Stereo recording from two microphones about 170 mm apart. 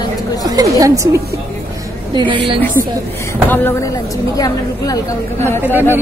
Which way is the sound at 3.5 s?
15° left (ahead or behind).